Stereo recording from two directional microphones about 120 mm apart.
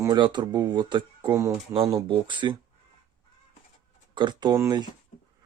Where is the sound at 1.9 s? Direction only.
35° right (ahead or behind).